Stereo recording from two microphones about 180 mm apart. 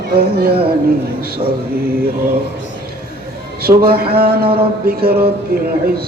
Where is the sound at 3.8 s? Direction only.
60° right (ahead or behind).